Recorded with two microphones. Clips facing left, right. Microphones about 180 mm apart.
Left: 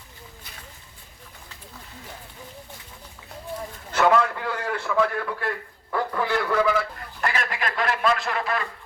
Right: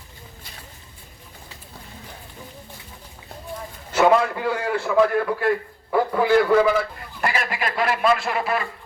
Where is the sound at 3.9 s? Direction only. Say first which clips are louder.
Right 3 dB; 10° right (ahead or behind).